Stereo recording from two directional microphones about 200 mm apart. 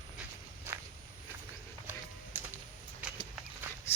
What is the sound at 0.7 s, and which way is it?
Walk, 10° right (ahead or behind).